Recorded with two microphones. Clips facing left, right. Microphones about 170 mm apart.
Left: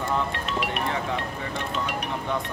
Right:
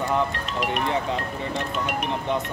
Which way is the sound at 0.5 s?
45° right (ahead or behind).